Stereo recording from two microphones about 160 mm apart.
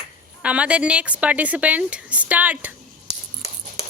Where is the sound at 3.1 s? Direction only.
40° left (ahead or behind).